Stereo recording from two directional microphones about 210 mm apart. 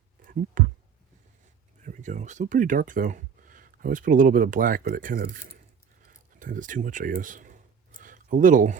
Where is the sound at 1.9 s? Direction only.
35° right (ahead or behind).